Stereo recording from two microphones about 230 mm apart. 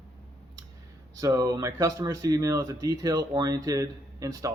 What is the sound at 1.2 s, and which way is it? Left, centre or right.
Speech, centre.